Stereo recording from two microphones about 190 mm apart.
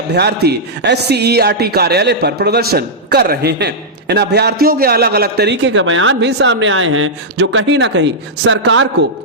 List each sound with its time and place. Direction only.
0.1 s a man's voice: 60° right (ahead or behind)